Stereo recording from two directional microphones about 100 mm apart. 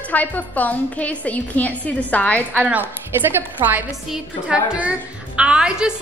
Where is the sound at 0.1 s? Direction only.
15° left (ahead or behind).